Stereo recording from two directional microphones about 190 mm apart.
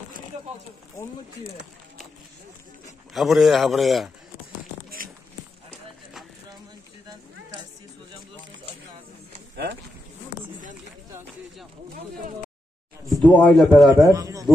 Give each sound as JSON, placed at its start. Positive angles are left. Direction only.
{"t": 3.1, "sound": "a man's voice", "side_deg": 0}
{"t": 9.6, "sound": "speech", "side_deg": -60}
{"t": 13.1, "sound": "a man's voice", "side_deg": 5}
{"t": 13.9, "sound": "speech", "side_deg": -15}